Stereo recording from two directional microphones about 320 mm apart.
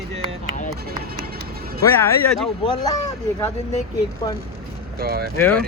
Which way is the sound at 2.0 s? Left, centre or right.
Centre.